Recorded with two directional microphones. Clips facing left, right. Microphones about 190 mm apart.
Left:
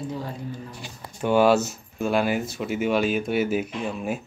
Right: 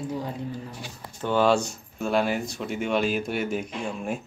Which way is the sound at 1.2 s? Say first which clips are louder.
Left 3 dB; 10° left (ahead or behind).